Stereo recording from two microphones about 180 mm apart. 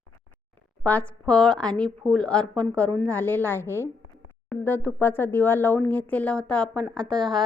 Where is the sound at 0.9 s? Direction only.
10° left (ahead or behind).